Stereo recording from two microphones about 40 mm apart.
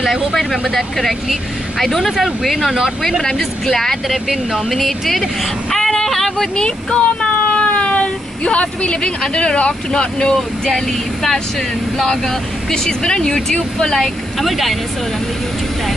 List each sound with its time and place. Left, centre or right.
0.0 s speech: centre
4.3 s speech: centre
4.6 s speech: centre
6.5 s speech: left
13.9 s speech: centre